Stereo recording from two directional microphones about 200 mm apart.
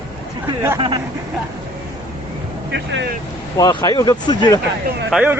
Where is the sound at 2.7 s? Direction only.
60° right (ahead or behind).